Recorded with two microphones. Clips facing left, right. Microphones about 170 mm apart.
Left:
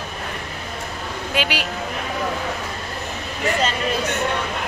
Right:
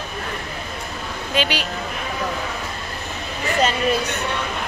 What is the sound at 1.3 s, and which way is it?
Speech, 10° left (ahead or behind).